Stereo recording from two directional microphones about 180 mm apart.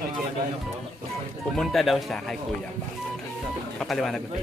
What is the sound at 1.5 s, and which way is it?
Speech, centre (ahead or behind).